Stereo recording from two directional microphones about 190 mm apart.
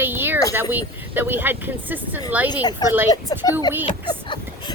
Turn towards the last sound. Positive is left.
turn(degrees=25)  # may be behind; listen again after turning